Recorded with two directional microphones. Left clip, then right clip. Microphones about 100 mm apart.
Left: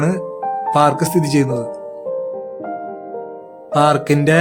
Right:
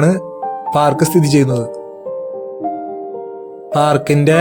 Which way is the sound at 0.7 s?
45° right (ahead or behind).